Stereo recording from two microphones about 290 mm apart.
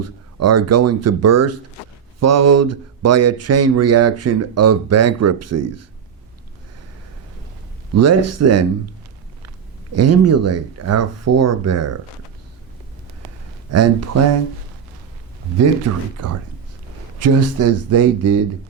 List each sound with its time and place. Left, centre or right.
0.0 s speech: right
7.9 s speech: right
9.9 s speech: right
13.7 s speech: right
15.9 s speech: right
17.2 s speech: right